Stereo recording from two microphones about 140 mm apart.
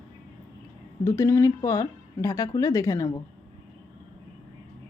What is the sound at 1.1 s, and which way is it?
A woman's voice, 20° left (ahead or behind).